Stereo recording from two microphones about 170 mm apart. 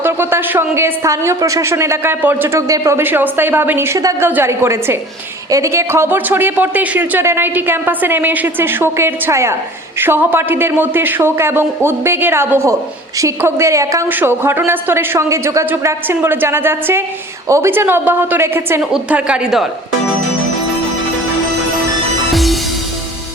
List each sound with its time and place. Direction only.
0.0 s a woman's voice: 15° right (ahead or behind)